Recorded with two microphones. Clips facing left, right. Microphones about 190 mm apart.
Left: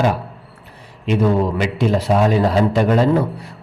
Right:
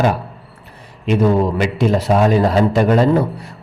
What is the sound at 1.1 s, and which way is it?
A man's voice, 45° right (ahead or behind).